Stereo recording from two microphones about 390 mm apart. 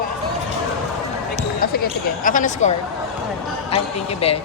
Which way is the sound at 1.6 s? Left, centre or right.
Left.